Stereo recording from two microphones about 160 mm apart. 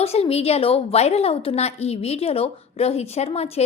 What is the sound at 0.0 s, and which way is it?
A woman's voice, 40° left (ahead or behind).